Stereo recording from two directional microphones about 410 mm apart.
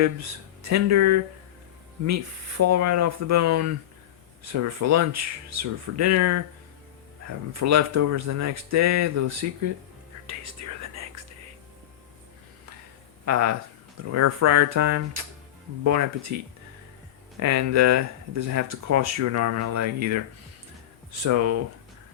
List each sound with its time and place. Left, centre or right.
0.0 s speech: right
7.5 s speech: right
10.2 s whispering: right
13.2 s speech: right
17.4 s speech: right